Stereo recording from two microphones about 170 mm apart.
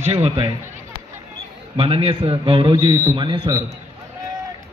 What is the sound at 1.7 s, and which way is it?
A man's voice, 35° right (ahead or behind).